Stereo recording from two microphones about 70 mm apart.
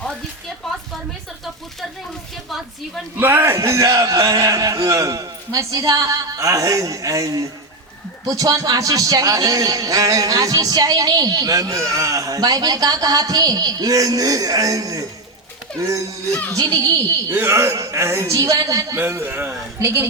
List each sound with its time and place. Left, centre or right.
3.2 s a man's voice: right
17.3 s a man's voice: right
19.8 s a man's voice: right